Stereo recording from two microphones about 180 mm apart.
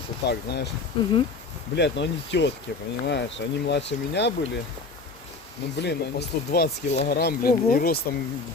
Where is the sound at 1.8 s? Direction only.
75° left (ahead or behind).